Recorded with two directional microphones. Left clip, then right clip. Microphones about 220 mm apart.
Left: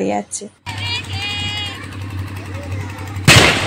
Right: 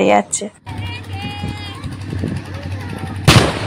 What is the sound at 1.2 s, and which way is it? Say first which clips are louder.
Vehicle: left 4 dB; 45° right (ahead or behind).